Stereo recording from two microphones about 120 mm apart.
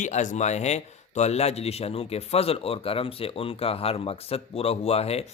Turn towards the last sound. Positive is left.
turn(degrees=60)  # may be behind; listen again after turning